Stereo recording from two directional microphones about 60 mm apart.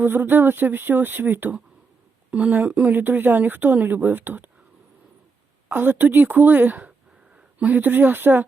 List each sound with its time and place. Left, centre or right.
0.0 s speech: right
5.6 s speech: right